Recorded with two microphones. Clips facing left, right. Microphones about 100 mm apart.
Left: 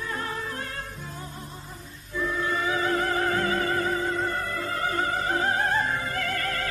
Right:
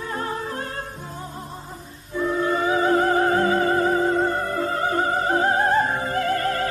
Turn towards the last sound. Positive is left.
turn(degrees=-30)  # may be behind; listen again after turning